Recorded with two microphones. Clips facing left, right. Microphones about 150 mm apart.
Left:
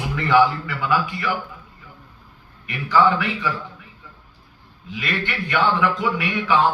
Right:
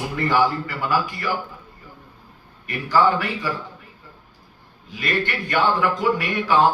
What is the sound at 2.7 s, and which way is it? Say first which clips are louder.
Speech: left 1 dB; 40° right (ahead or behind).